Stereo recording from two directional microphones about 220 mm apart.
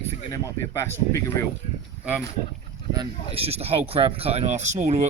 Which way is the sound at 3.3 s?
25° right (ahead or behind).